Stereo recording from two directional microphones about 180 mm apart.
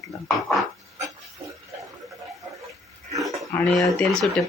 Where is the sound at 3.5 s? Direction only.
Centre (ahead or behind).